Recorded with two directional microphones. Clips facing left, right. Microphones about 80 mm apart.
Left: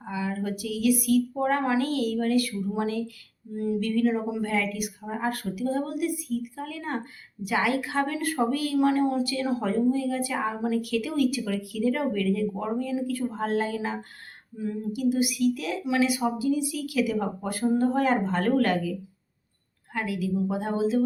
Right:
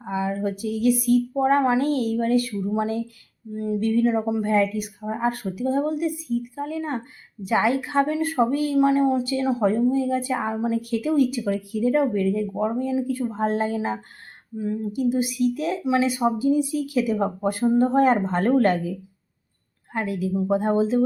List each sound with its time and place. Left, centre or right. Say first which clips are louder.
0.0 s a woman's voice: right 5 dB; right